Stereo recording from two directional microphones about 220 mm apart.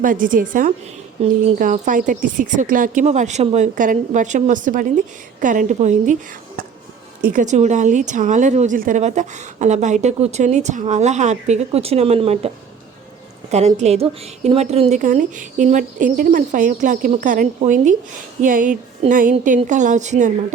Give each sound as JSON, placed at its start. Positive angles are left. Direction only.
{"t": 0.0, "sound": "a woman's voice", "side_deg": -40}
{"t": 7.3, "sound": "a woman's voice", "side_deg": -35}
{"t": 13.5, "sound": "a woman's voice", "side_deg": -30}